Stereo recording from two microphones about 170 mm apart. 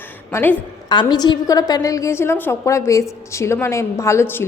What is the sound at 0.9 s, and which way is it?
A woman's voice, 25° left (ahead or behind).